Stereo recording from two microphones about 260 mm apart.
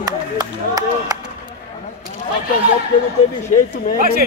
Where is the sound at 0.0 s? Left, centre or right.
Centre.